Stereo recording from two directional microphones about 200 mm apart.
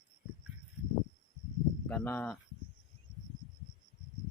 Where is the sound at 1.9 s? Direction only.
10° left (ahead or behind).